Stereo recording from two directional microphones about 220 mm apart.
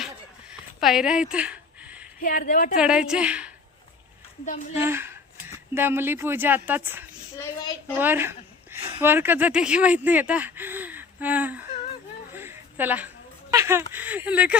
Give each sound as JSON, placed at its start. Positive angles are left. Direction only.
{"t": 0.8, "sound": "a sound", "side_deg": 0}
{"t": 2.2, "sound": "a woman's voice", "side_deg": 40}
{"t": 2.7, "sound": "a woman's voice", "side_deg": -5}
{"t": 4.4, "sound": "a woman's voice", "side_deg": 35}
{"t": 4.8, "sound": "speech", "side_deg": -10}
{"t": 12.3, "sound": "a sound", "side_deg": -10}
{"t": 13.9, "sound": "a woman's voice", "side_deg": -5}